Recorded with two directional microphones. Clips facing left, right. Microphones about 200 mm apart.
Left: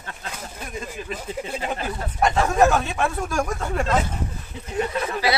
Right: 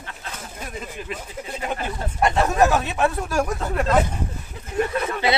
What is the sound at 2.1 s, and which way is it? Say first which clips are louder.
Speech: even; centre (ahead or behind).